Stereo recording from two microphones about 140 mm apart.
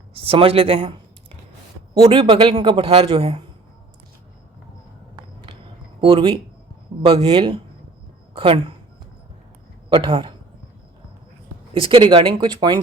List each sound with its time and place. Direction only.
0.2 s speech: 40° right (ahead or behind)
2.0 s speech: 40° right (ahead or behind)
5.1 s a sound: 35° right (ahead or behind)
6.0 s speech: 40° right (ahead or behind)
9.9 s speech: 35° right (ahead or behind)
11.7 s speech: 35° right (ahead or behind)